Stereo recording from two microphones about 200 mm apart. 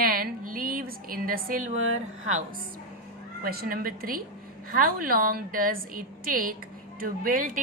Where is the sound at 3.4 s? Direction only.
50° right (ahead or behind).